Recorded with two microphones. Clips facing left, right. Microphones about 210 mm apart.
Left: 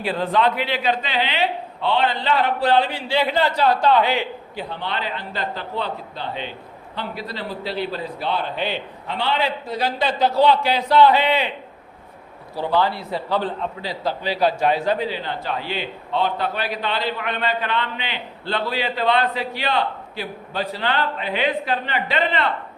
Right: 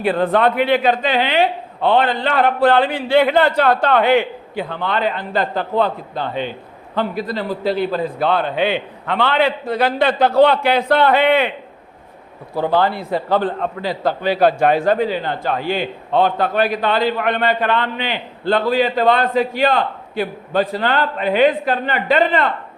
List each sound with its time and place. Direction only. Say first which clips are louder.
0.0 s a man's voice: right 5 dB; 55° right (ahead or behind)
12.5 s a man's voice: right 4 dB; 50° right (ahead or behind)